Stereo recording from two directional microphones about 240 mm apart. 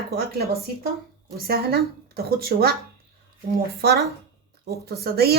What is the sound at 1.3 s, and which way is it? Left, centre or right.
Speech, right.